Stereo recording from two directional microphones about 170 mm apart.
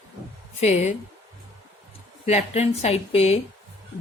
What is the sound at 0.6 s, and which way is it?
Speech, 40° left (ahead or behind).